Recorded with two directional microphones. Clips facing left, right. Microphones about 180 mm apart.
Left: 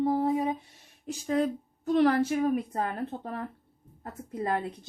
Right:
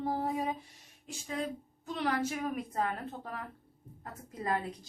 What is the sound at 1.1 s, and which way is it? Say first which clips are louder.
Speech: left 9 dB; 45° left (ahead or behind).